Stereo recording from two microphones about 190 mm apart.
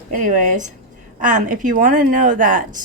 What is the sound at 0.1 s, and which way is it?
Speech, 45° right (ahead or behind).